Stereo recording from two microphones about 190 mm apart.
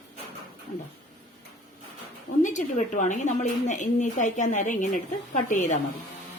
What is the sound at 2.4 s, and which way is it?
A woman's voice, 40° left (ahead or behind).